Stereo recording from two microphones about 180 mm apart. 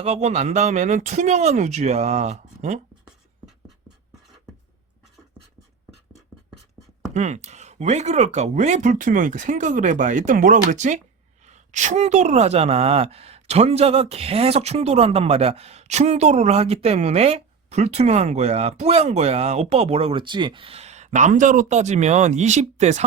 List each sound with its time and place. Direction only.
0.0 s speech: 35° right (ahead or behind)
7.1 s speech: 40° right (ahead or behind)